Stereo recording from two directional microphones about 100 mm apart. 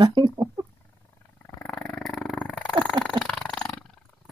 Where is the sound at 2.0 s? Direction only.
5° left (ahead or behind).